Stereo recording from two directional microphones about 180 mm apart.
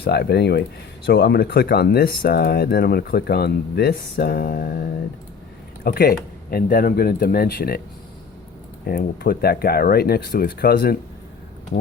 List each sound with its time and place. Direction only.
0.0 s speech: 65° left (ahead or behind)
8.9 s speech: 55° left (ahead or behind)